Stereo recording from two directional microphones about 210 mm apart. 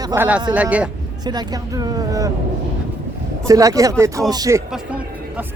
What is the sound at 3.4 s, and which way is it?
Speech, 15° right (ahead or behind).